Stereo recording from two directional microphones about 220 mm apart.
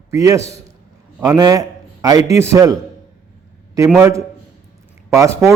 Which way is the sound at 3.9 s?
10° right (ahead or behind).